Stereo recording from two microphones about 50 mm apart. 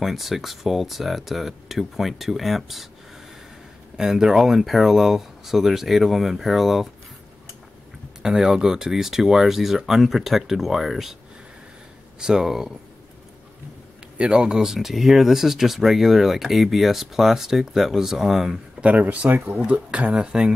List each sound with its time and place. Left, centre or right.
0.0 s speech: centre
3.9 s speech: centre
8.2 s speech: centre
12.2 s speech: centre
14.1 s speech: centre
18.8 s speech: right